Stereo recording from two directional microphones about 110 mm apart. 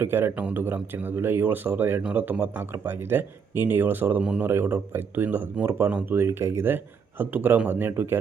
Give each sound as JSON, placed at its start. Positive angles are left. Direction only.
{"t": 0.0, "sound": "speech", "side_deg": -20}